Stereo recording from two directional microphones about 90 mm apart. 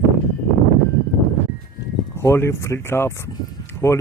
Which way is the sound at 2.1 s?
30° left (ahead or behind).